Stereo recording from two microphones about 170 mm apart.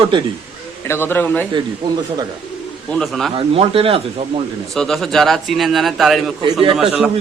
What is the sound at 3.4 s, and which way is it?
Speech, 35° right (ahead or behind).